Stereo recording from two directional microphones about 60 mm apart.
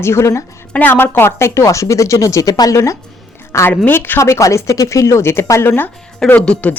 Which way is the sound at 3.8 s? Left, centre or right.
Left.